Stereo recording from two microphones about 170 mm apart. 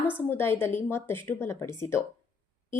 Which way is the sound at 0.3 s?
15° left (ahead or behind).